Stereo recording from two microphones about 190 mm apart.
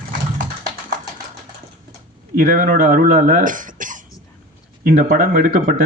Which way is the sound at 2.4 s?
50° right (ahead or behind).